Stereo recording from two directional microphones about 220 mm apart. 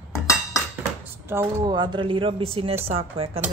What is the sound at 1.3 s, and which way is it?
Speech, 15° right (ahead or behind).